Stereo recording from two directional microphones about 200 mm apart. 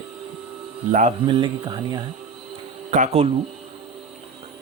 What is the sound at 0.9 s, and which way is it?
Speech, 40° right (ahead or behind).